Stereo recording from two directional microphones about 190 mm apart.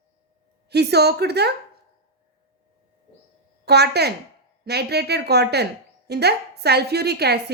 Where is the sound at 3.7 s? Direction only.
60° right (ahead or behind).